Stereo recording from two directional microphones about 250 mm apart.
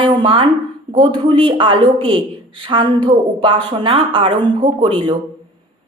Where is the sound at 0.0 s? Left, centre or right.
Right.